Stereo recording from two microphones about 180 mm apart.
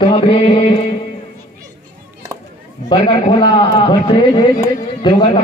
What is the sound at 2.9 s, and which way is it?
Speech, 25° left (ahead or behind).